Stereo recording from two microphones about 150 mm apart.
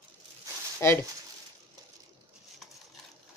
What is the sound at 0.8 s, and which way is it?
Speech, 20° left (ahead or behind).